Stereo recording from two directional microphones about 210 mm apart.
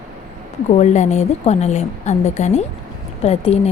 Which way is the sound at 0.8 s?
30° left (ahead or behind).